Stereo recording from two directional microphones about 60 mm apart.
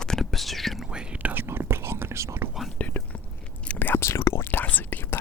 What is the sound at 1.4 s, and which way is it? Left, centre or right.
Whispering, right.